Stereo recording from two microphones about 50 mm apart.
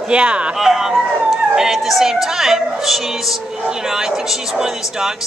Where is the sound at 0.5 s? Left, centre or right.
Centre.